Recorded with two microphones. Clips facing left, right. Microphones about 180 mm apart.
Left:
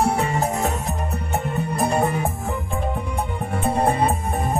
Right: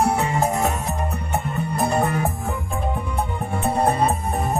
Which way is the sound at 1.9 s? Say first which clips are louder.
Even; 10° left (ahead or behind).